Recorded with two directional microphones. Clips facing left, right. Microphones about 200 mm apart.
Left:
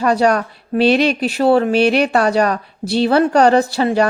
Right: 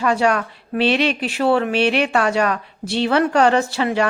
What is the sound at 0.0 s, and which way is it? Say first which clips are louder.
Speech: left 3 dB; 40° left (ahead or behind).